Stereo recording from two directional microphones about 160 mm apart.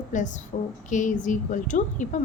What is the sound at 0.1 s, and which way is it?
A woman's voice, 50° left (ahead or behind).